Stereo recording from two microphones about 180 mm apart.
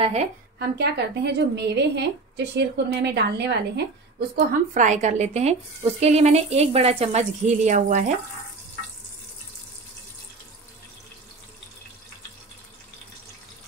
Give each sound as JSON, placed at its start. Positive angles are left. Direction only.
{"t": 0.0, "sound": "speech", "side_deg": -40}
{"t": 0.6, "sound": "a woman's voice", "side_deg": -65}
{"t": 4.5, "sound": "speech", "side_deg": -45}